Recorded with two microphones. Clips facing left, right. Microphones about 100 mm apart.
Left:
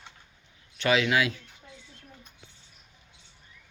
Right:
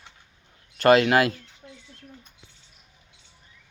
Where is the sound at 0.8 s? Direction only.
50° right (ahead or behind).